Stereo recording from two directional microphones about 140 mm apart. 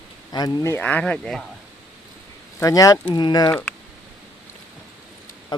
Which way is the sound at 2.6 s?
25° left (ahead or behind).